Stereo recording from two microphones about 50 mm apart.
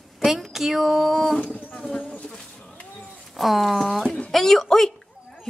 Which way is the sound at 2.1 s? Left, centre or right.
Left.